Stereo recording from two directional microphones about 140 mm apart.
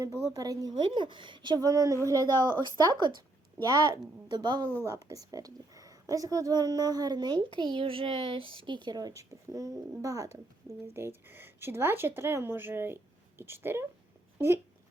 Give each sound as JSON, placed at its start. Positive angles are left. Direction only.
{"t": 0.3, "sound": "a woman's voice", "side_deg": -25}